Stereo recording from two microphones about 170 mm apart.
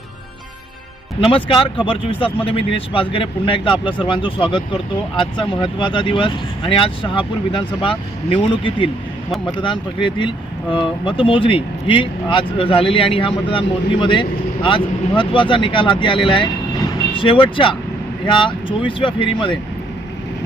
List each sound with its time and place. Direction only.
1.5 s speech: 30° left (ahead or behind)